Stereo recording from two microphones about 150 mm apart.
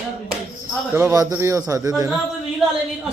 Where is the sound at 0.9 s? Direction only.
15° right (ahead or behind).